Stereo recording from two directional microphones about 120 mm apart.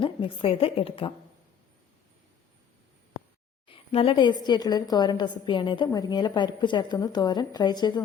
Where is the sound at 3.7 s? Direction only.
50° left (ahead or behind).